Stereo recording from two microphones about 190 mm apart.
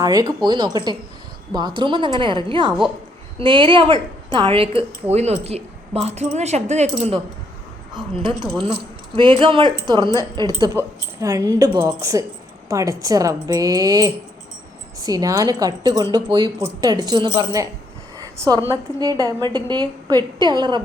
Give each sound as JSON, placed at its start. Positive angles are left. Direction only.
{"t": 0.0, "sound": "speech", "side_deg": -20}
{"t": 7.9, "sound": "speech", "side_deg": -25}
{"t": 18.2, "sound": "a sound", "side_deg": -20}
{"t": 18.7, "sound": "speech", "side_deg": -20}